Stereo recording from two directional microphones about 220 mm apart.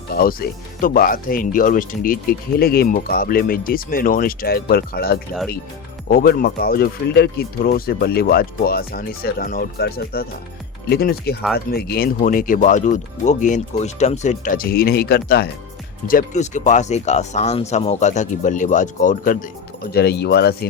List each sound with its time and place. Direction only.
0.1 s speech: 40° left (ahead or behind)